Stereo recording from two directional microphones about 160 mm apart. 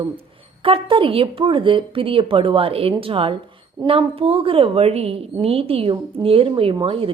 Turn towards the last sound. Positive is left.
turn(degrees=-35)  # may be behind; listen again after turning